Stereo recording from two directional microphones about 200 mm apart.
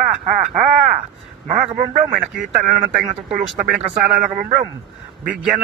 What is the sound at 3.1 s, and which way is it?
Speech, 30° right (ahead or behind).